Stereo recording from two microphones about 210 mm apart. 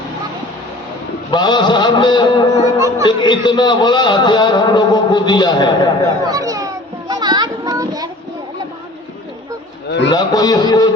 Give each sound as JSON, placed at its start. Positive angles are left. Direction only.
{"t": 1.3, "sound": "a man's voice", "side_deg": 20}
{"t": 6.2, "sound": "children playing", "side_deg": -15}
{"t": 10.1, "sound": "a man's voice", "side_deg": 15}